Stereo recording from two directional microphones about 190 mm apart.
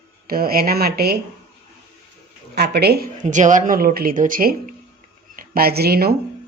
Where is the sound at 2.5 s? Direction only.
60° right (ahead or behind).